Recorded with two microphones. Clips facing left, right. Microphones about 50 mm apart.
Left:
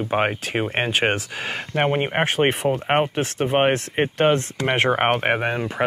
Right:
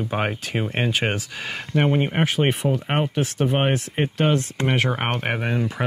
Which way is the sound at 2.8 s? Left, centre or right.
Left.